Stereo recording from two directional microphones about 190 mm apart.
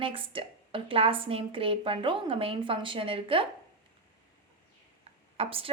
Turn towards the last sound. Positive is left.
turn(degrees=-30)  # may be behind; listen again after turning